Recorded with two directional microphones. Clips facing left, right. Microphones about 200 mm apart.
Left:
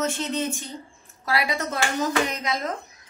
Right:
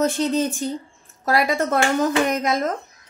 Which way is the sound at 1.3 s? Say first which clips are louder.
Right 6 dB; 45° right (ahead or behind).